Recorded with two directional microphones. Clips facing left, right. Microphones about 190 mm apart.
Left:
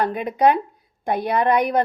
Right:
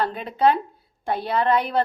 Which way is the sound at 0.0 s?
15° left (ahead or behind).